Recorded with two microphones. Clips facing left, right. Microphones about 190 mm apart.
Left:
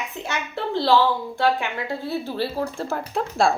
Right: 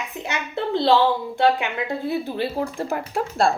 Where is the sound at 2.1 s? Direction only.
15° right (ahead or behind).